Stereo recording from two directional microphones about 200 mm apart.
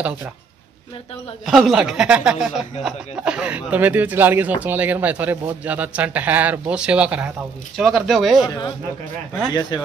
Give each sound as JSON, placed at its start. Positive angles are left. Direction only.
{"t": 1.4, "sound": "speech", "side_deg": 0}
{"t": 9.5, "sound": "speech", "side_deg": 20}